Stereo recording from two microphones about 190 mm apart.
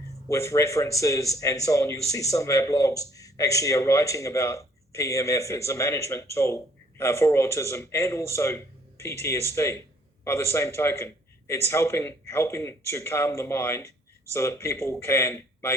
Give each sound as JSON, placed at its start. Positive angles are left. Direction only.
{"t": 0.3, "sound": "speech", "side_deg": 15}